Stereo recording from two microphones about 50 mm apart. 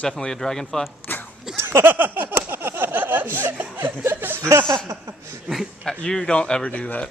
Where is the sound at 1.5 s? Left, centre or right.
Right.